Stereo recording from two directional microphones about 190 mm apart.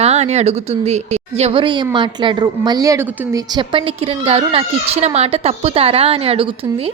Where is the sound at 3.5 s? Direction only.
25° right (ahead or behind).